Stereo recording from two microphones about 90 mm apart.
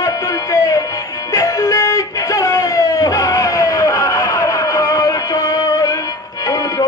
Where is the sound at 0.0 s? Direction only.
40° left (ahead or behind).